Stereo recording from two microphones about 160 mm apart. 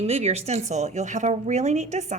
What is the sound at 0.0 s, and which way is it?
Speech, 40° right (ahead or behind).